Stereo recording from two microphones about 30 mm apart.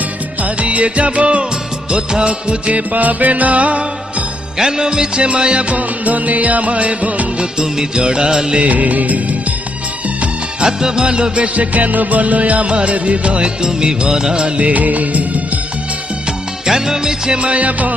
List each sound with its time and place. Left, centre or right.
0.6 s music: right
1.9 s music of bollywood: right
2.9 s music: right
4.5 s music of bollywood: centre; by 5.6 s right
5.6 s music: right
7.9 s music of bollywood: right
8.6 s music: right
10.6 s music of bollywood: right
11.3 s music: right
12.7 s music of bollywood: right
13.4 s music of bollywood: right
14.7 s music: right
16.6 s music of bollywood: centre
17.3 s music: right